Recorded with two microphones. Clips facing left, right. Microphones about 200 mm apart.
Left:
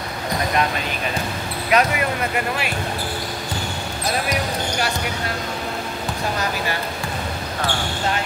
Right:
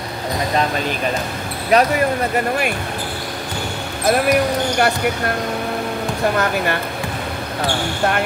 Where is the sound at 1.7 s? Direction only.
35° right (ahead or behind).